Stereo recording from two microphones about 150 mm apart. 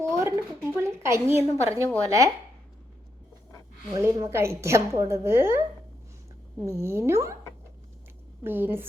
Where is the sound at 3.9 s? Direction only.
25° right (ahead or behind).